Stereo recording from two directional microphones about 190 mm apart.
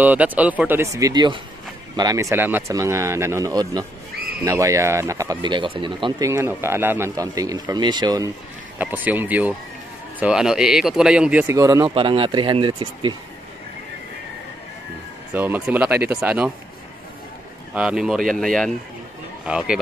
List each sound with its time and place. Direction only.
0.0 s speech: 10° right (ahead or behind)
8.7 s speech: 10° right (ahead or behind)
11.9 s speech: 30° right (ahead or behind)
15.3 s speech: 10° right (ahead or behind)
17.7 s speech: 5° right (ahead or behind)